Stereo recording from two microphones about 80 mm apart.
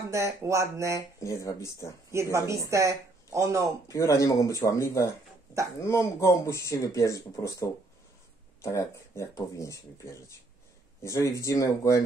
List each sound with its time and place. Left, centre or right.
0.1 s speech: right
1.2 s speech: left
2.3 s speech: right
3.8 s speech: left
8.6 s speech: left
11.1 s speech: left